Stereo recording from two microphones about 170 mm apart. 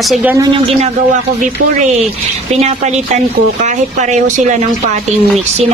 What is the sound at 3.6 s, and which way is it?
Speech, 45° right (ahead or behind).